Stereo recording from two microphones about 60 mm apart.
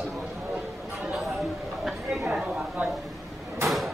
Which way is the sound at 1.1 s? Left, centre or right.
Centre.